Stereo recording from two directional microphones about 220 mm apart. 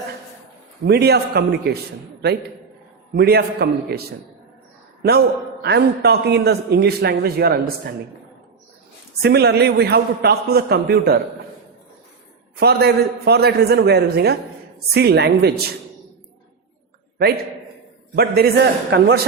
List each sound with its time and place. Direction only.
0.9 s a man's voice: 45° right (ahead or behind)
3.2 s a man's voice: 45° right (ahead or behind)
5.6 s a man's voice: 50° right (ahead or behind)
9.2 s a man's voice: 50° right (ahead or behind)
12.5 s a man's voice: 45° right (ahead or behind)
18.1 s a man's voice: 45° right (ahead or behind)